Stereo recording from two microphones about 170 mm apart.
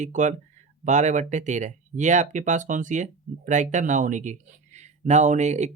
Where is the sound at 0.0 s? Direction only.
45° right (ahead or behind).